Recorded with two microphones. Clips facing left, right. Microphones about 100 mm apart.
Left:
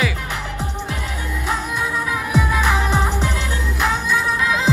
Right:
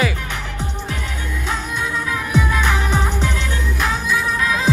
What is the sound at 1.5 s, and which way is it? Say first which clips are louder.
Music: left 1 dB; 5° left (ahead or behind).